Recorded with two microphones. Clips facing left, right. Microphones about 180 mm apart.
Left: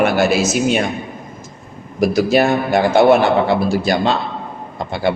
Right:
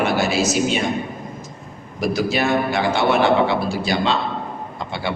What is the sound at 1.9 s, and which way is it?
A man's voice, 45° left (ahead or behind).